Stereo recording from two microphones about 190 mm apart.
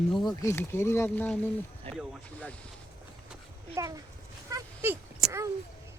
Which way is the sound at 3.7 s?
15° right (ahead or behind).